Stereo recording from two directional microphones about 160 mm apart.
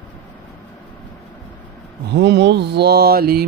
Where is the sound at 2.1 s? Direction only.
90° right; by 3.4 s 70° right (ahead or behind).